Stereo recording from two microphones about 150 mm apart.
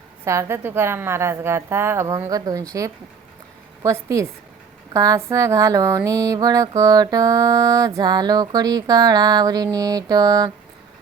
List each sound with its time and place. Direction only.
0.3 s a woman's voice: 20° right (ahead or behind)
3.8 s mantra: 20° right (ahead or behind)